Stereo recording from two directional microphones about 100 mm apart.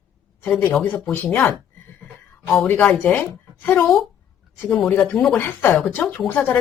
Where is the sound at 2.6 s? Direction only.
15° left (ahead or behind).